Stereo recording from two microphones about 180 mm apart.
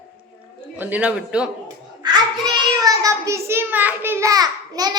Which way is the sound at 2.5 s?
20° right (ahead or behind).